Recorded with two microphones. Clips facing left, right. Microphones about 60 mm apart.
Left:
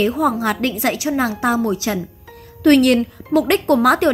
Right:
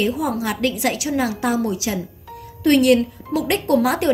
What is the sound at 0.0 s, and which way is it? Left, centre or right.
Speech, left.